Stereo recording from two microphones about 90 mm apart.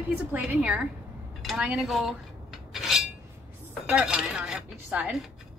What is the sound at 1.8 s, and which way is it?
Cutlery, centre (ahead or behind).